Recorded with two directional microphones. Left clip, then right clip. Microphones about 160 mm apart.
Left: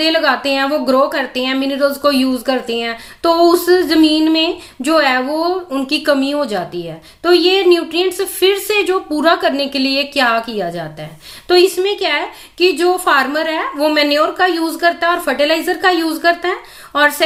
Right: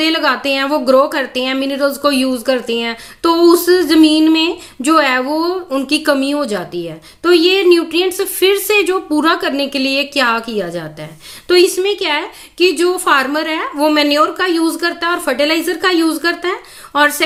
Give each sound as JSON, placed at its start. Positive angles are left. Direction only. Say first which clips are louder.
{"t": 0.0, "sound": "a woman's voice", "louder": "left 1 dB", "side_deg": -25}